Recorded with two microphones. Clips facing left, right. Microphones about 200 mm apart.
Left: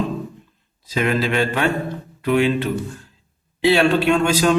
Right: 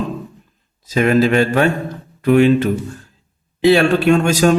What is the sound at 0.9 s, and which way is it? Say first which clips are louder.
A man's voice: right 7 dB; 45° right (ahead or behind).